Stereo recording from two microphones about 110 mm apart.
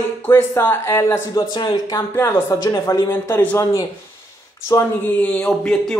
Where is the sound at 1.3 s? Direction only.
40° left (ahead or behind).